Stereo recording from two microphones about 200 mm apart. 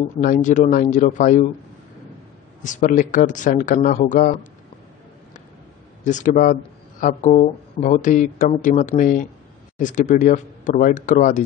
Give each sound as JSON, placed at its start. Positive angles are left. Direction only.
{"t": 0.2, "sound": "speech", "side_deg": 40}
{"t": 2.6, "sound": "speech", "side_deg": 40}
{"t": 6.0, "sound": "speech", "side_deg": 40}